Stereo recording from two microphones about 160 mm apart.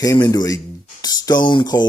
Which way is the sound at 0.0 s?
25° left (ahead or behind).